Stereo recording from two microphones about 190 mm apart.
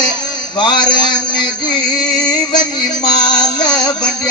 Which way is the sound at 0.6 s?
25° left (ahead or behind).